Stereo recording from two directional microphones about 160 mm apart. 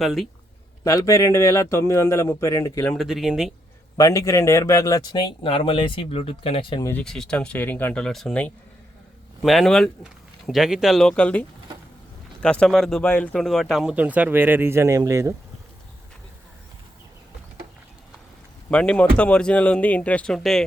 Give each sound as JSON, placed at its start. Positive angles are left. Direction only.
{"t": 0.0, "sound": "speech", "side_deg": 0}
{"t": 0.9, "sound": "speech", "side_deg": 20}
{"t": 2.9, "sound": "speech", "side_deg": 0}
{"t": 3.9, "sound": "speech", "side_deg": 20}
{"t": 7.0, "sound": "speech", "side_deg": 5}
{"t": 18.7, "sound": "speech", "side_deg": 5}